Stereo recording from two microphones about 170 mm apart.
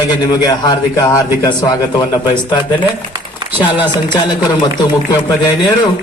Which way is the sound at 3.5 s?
10° right (ahead or behind).